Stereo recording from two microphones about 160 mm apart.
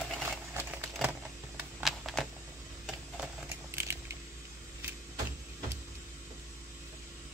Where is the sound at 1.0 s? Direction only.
5° right (ahead or behind).